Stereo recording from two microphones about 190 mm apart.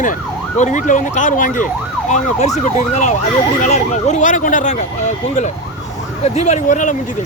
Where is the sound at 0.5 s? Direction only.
40° left (ahead or behind).